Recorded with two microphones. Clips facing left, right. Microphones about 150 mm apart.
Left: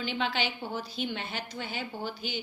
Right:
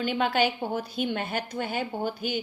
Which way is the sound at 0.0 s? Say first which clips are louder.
Right 7 dB; 50° right (ahead or behind).